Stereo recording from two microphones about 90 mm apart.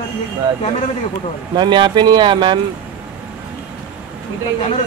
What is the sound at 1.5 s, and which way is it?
Speech, 55° right (ahead or behind).